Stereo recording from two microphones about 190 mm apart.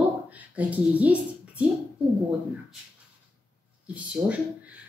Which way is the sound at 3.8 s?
5° right (ahead or behind).